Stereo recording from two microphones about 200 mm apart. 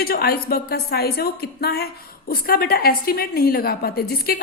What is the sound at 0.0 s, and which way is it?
A woman's voice, 50° left (ahead or behind).